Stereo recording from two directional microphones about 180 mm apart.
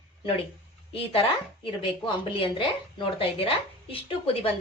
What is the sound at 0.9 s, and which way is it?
Speech, 30° left (ahead or behind).